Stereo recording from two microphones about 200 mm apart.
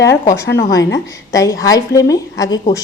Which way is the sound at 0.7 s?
15° left (ahead or behind).